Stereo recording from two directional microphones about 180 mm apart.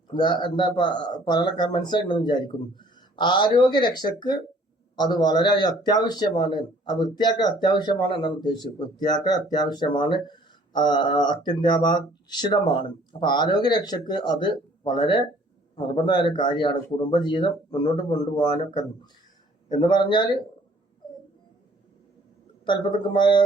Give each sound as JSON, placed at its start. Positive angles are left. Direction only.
{"t": 0.1, "sound": "a man's voice", "side_deg": 25}
{"t": 19.7, "sound": "a man's voice", "side_deg": 25}
{"t": 22.6, "sound": "a man's voice", "side_deg": 25}